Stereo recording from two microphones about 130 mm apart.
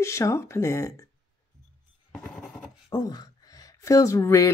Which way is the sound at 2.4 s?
Centre (ahead or behind).